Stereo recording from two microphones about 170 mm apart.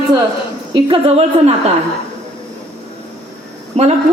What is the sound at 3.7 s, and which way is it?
Speech, 40° right (ahead or behind).